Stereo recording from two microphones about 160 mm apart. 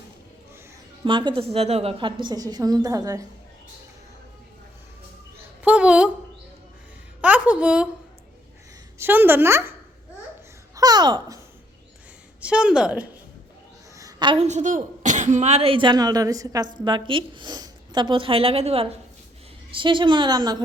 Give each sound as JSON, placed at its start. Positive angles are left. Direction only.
{"t": 1.0, "sound": "a woman's voice", "side_deg": -30}
{"t": 5.6, "sound": "a woman's voice", "side_deg": -5}
{"t": 7.2, "sound": "a woman's voice", "side_deg": -10}
{"t": 9.0, "sound": "a woman's voice", "side_deg": -15}
{"t": 10.8, "sound": "a child's voice", "side_deg": -25}
{"t": 12.4, "sound": "a woman's voice", "side_deg": -5}
{"t": 14.0, "sound": "a sound", "side_deg": -30}
{"t": 14.4, "sound": "a woman's voice", "side_deg": -50}